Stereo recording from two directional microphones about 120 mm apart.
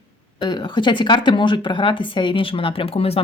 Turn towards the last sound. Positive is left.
turn(degrees=55)  # may be behind; listen again after turning